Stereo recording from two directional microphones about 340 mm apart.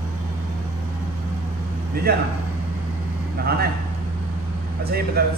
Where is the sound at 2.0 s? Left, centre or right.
Right.